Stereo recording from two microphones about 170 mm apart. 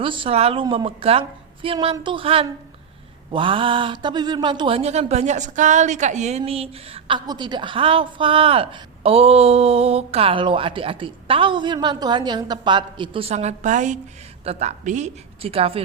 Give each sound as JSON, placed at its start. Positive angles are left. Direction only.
{"t": 0.0, "sound": "speech", "side_deg": -30}